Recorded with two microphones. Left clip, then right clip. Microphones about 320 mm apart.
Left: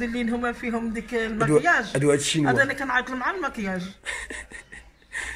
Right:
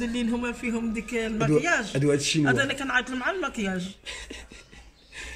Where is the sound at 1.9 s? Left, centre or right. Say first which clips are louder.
Left 3 dB; centre.